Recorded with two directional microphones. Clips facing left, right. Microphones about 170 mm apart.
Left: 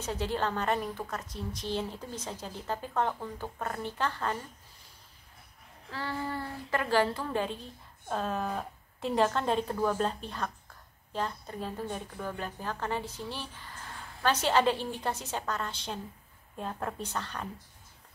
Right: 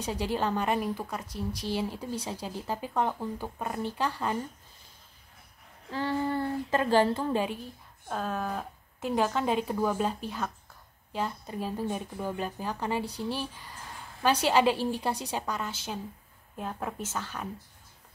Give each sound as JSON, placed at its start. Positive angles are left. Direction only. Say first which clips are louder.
{"t": 0.0, "sound": "speech", "louder": "right 2 dB", "side_deg": -15}
{"t": 1.3, "sound": "speech", "louder": "right 4 dB", "side_deg": 25}
{"t": 1.7, "sound": "speech", "louder": "right 2 dB", "side_deg": -10}
{"t": 5.9, "sound": "a woman's voice", "louder": "right 6 dB", "side_deg": -20}
{"t": 8.1, "sound": "a woman's voice", "louder": "even", "side_deg": 0}